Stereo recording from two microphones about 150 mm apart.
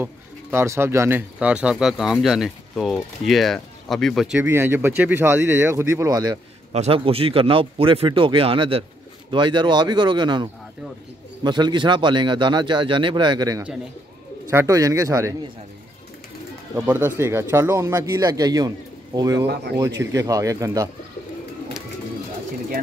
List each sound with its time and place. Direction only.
0.0 s speech: 15° right (ahead or behind); by 4.4 s centre (ahead or behind)
4.4 s speech: 15° right (ahead or behind)
6.7 s speech: 45° right (ahead or behind); by 15.3 s 20° right (ahead or behind)
16.7 s speech: 15° right (ahead or behind)
19.4 s speech: 90° right
19.8 s speech: 20° right (ahead or behind)